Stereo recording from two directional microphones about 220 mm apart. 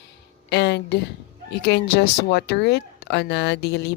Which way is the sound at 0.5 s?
50° left (ahead or behind).